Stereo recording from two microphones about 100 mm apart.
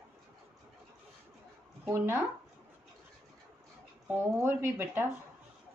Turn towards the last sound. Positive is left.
turn(degrees=-25)  # may be behind; listen again after turning